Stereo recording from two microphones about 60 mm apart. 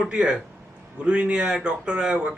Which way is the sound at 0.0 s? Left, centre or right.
Centre.